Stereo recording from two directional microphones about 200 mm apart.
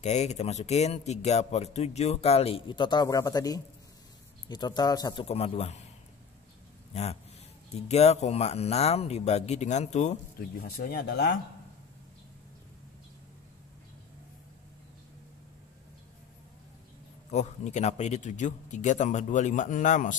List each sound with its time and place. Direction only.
0.0 s speech: 35° left (ahead or behind); by 5.2 s 20° left (ahead or behind)
5.2 s speech: 30° left (ahead or behind)
6.9 s speech: 30° left (ahead or behind)
10.6 s speech: 45° left (ahead or behind)
17.3 s speech: 35° left (ahead or behind)